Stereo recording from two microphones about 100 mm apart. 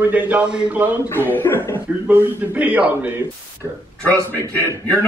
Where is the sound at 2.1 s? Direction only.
15° right (ahead or behind).